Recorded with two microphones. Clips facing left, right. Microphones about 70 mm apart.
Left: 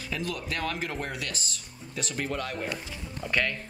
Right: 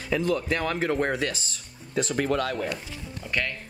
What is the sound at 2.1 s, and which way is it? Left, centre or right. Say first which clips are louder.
Speech: right 6 dB; right.